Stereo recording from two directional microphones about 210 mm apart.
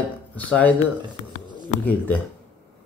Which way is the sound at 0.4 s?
5° left (ahead or behind).